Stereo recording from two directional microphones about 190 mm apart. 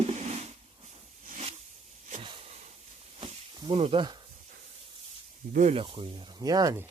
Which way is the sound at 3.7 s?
30° right (ahead or behind).